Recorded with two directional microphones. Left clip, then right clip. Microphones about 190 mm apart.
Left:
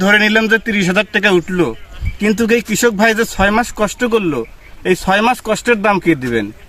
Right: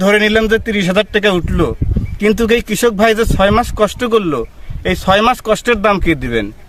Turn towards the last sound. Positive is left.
turn(degrees=-25)  # may be behind; listen again after turning